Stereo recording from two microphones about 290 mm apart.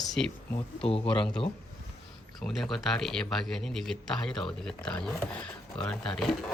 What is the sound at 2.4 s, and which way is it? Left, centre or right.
Speech, centre.